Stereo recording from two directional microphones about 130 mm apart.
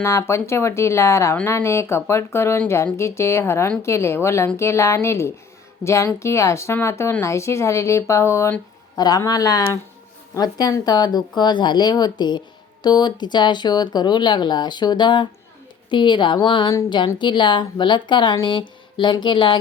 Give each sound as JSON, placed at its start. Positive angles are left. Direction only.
{"t": 0.0, "sound": "speech", "side_deg": 20}